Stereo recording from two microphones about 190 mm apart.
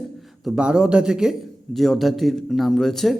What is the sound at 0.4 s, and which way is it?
A man's voice, 5° right (ahead or behind).